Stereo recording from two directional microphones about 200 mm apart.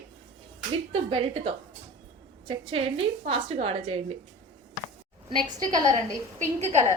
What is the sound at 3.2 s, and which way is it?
Speech, 30° right (ahead or behind).